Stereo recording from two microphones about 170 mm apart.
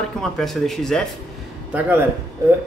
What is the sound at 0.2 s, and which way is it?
Speech, centre (ahead or behind).